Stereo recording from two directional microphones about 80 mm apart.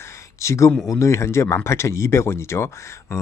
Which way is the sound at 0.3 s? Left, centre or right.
Left.